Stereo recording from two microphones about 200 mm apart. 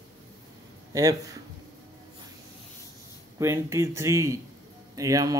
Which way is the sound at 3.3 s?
15° right (ahead or behind).